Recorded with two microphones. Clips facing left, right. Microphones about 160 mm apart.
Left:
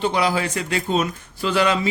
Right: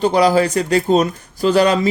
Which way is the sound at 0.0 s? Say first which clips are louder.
Right 7 dB; 40° right (ahead or behind).